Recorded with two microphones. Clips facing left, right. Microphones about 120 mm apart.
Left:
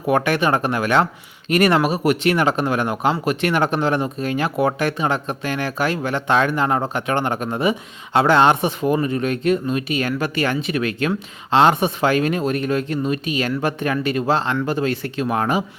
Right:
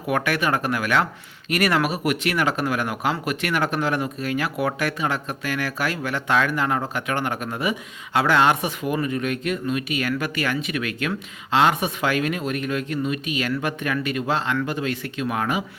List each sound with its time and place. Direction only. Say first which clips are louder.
0.1 s speech: left 5 dB; 25° left (ahead or behind)